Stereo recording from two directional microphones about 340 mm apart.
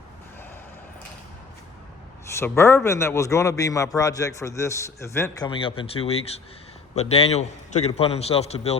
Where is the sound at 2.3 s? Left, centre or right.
Centre.